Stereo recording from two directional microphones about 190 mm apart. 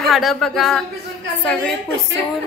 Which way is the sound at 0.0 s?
Centre (ahead or behind).